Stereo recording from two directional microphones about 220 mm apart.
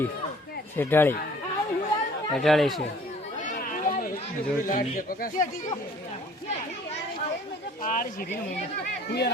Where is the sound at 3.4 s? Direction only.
35° left (ahead or behind).